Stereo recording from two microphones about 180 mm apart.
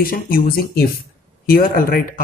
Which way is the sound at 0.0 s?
55° left (ahead or behind).